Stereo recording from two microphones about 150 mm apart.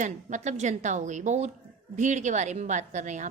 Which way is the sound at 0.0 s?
55° right (ahead or behind).